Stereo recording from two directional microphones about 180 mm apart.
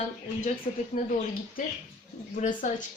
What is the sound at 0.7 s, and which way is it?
Speech, 45° left (ahead or behind).